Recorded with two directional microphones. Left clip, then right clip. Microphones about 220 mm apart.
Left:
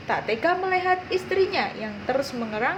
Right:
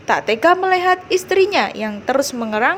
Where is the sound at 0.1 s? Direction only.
50° right (ahead or behind).